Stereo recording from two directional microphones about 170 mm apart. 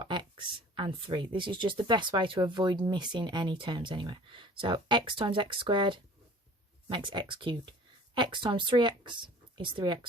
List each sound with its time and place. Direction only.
0.0 s speech: 30° right (ahead or behind)